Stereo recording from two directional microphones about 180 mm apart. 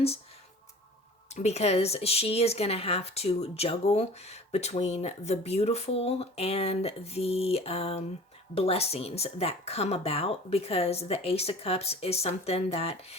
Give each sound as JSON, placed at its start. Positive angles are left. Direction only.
{"t": 1.3, "sound": "speech", "side_deg": 35}